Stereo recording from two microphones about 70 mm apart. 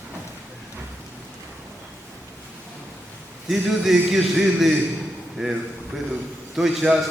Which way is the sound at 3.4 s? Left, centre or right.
Centre.